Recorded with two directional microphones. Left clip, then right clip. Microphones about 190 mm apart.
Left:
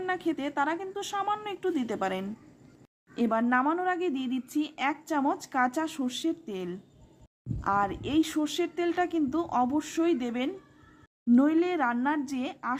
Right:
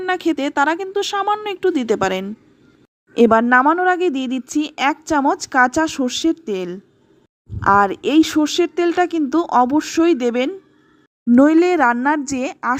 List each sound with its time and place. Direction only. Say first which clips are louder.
0.0 s a woman's voice: right 11 dB; 35° right (ahead or behind)